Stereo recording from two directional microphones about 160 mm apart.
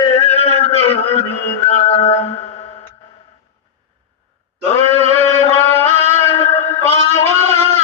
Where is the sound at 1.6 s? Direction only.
40° left (ahead or behind).